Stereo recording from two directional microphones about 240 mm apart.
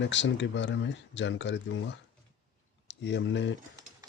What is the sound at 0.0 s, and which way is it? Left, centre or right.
Speech, left.